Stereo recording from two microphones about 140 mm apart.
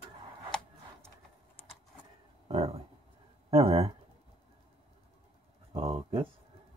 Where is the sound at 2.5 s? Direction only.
45° right (ahead or behind).